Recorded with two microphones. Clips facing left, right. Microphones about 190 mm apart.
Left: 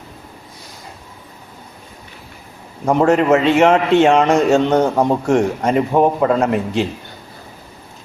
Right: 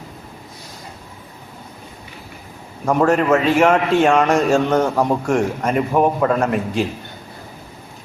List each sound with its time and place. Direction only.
2.8 s a man's voice: 20° left (ahead or behind)